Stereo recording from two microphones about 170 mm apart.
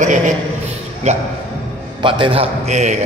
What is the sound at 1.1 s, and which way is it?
Speech, 40° right (ahead or behind).